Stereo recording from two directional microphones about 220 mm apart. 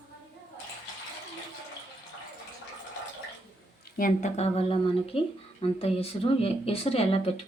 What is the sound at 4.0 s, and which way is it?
Speech, 35° left (ahead or behind).